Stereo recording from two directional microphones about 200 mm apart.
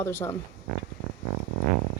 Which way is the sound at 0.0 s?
10° left (ahead or behind).